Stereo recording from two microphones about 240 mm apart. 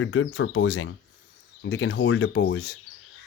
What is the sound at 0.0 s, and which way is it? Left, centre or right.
Speech, left.